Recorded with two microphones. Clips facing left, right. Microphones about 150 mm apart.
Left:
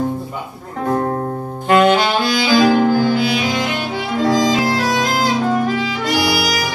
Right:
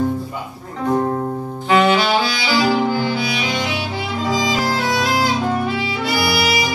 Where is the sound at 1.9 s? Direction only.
50° left (ahead or behind).